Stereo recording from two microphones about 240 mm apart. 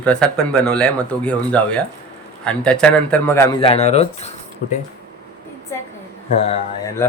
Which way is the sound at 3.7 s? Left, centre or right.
Left.